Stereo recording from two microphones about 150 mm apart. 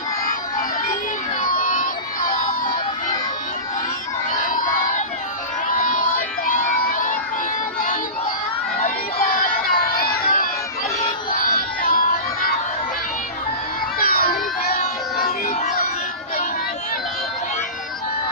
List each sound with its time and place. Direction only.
1.5 s crowd: 65° left (ahead or behind)
4.4 s crowd: 65° left (ahead or behind)
8.8 s crowd: 50° left (ahead or behind)
9.3 s a sound: 70° left (ahead or behind)
14.0 s emergency vehicle: 80° left; by 15.7 s 60° left (ahead or behind)